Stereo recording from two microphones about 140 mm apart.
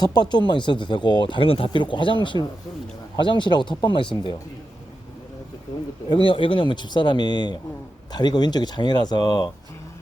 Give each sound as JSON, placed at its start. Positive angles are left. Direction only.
{"t": 0.0, "sound": "speech", "side_deg": 30}
{"t": 6.1, "sound": "speech", "side_deg": 35}